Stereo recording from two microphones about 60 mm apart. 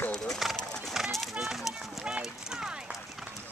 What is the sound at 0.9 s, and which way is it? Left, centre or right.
Run, centre.